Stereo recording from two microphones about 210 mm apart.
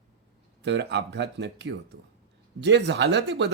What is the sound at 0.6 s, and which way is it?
A man's voice, 55° right (ahead or behind).